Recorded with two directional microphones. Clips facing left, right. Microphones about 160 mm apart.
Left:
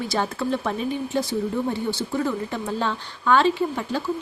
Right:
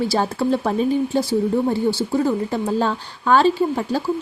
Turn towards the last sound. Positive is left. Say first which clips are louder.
# right 4 dB
turn(degrees=-35)  # may be behind; listen again after turning